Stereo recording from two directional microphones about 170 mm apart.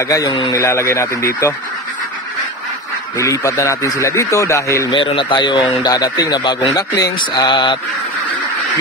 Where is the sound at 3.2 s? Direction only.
20° left (ahead or behind).